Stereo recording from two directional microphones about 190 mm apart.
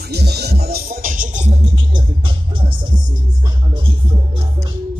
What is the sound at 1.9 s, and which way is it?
Music, 25° right (ahead or behind).